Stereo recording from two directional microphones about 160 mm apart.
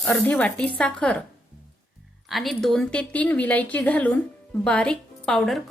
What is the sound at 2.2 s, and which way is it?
Speech, centre (ahead or behind).